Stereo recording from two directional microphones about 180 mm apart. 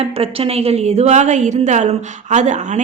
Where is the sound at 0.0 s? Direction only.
35° right (ahead or behind).